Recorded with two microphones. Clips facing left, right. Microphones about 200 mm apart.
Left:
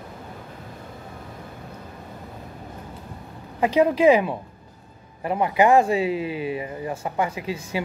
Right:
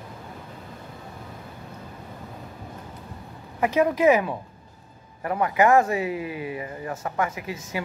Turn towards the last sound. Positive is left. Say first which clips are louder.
# left 4 dB
turn(degrees=30)  # may be behind; listen again after turning